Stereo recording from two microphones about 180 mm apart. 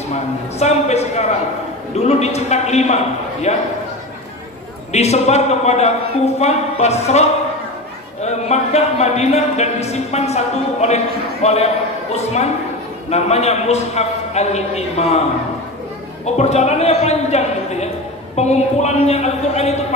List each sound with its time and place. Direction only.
0.6 s speech: 35° left (ahead or behind)
4.9 s speech: 35° left (ahead or behind)
13.1 s speech: 35° left (ahead or behind)
16.3 s speech: 40° left (ahead or behind)